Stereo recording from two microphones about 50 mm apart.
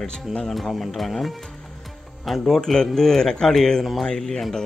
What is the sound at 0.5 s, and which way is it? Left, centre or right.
Speech, centre.